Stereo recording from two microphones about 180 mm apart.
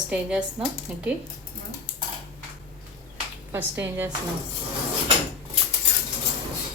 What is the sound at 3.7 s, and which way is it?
Speech, 10° right (ahead or behind).